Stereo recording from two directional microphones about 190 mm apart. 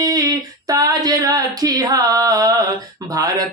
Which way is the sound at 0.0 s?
20° right (ahead or behind).